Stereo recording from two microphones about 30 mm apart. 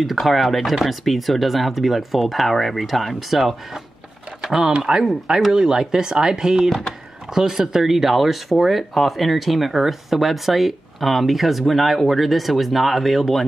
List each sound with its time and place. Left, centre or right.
0.0 s speech: centre
4.4 s speech: centre